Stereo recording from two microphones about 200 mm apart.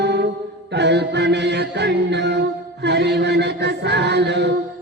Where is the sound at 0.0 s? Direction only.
55° right (ahead or behind).